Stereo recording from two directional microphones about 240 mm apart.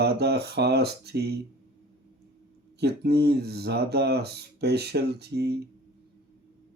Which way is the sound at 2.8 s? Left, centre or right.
Right.